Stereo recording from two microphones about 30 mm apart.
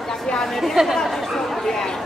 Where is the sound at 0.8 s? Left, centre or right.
Centre.